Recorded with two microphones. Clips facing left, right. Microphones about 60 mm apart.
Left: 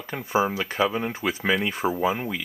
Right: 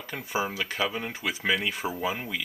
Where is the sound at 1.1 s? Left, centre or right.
Left.